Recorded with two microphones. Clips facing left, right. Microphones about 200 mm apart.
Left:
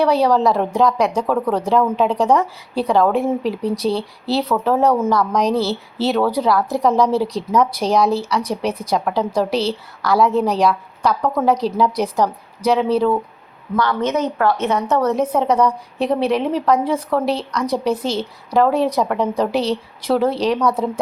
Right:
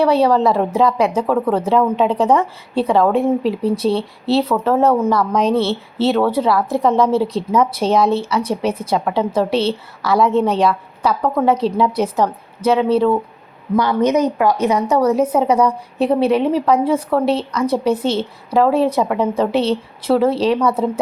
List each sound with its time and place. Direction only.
0.0 s a woman's voice: centre (ahead or behind)
13.7 s a woman's voice: 15° right (ahead or behind)
17.8 s a woman's voice: 30° right (ahead or behind)
18.1 s a woman's voice: centre (ahead or behind)